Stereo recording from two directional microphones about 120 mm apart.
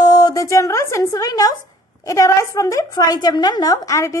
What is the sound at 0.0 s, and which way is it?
A woman's voice, 35° left (ahead or behind).